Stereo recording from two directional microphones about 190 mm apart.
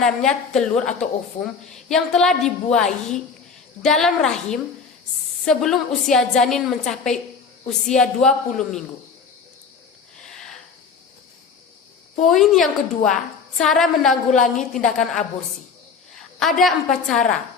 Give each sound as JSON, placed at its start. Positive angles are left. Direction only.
{"t": 0.0, "sound": "a woman's voice", "side_deg": 5}
{"t": 10.2, "sound": "a sound", "side_deg": 0}
{"t": 12.2, "sound": "a woman's voice", "side_deg": 0}
{"t": 14.3, "sound": "a woman's voice", "side_deg": 40}
{"t": 14.8, "sound": "a woman's voice", "side_deg": 0}
{"t": 16.4, "sound": "a woman's voice", "side_deg": 0}